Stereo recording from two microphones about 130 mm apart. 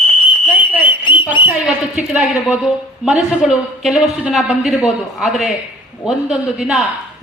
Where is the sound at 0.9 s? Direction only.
40° left (ahead or behind).